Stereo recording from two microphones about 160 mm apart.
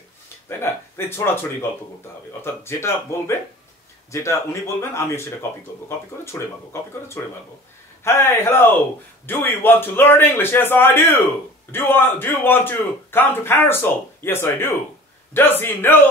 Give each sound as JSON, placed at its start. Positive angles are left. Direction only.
{"t": 0.5, "sound": "a man's voice", "side_deg": 15}